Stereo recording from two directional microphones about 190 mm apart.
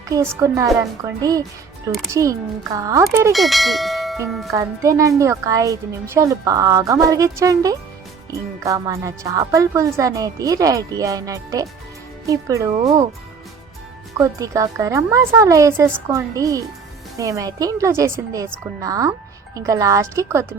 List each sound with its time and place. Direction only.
0.1 s a woman's voice: 15° right (ahead or behind)
3.3 s bell: centre (ahead or behind)
4.3 s speech: centre (ahead or behind)
4.5 s a woman's voice: 15° right (ahead or behind)
14.2 s a woman's voice: 15° right (ahead or behind)